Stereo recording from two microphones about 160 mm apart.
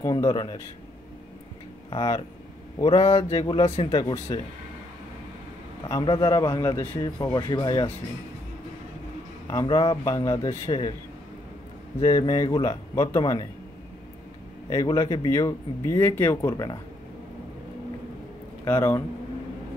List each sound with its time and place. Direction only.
0.0 s speech: 25° left (ahead or behind)
1.9 s speech: 25° left (ahead or behind)
2.8 s a sound: 30° left (ahead or behind)
3.1 s speech: 20° left (ahead or behind); by 3.9 s 40° left (ahead or behind)
3.9 s speech: 25° left (ahead or behind)
5.9 s speech: 20° left (ahead or behind)
7.2 s speech: 30° left (ahead or behind)
9.5 s speech: 25° left (ahead or behind)
12.0 s speech: 25° left (ahead or behind)
14.7 s speech: 20° left (ahead or behind)
18.7 s speech: 15° left (ahead or behind)